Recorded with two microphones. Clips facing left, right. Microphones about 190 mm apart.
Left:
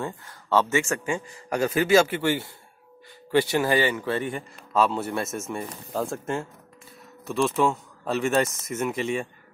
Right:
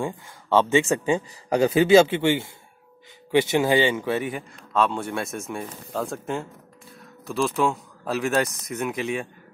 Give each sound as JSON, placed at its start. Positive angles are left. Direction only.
{"t": 0.0, "sound": "speech", "side_deg": -15}
{"t": 4.1, "sound": "speech", "side_deg": -5}